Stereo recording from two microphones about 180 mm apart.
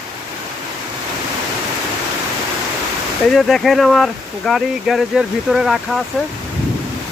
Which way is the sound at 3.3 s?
Centre (ahead or behind).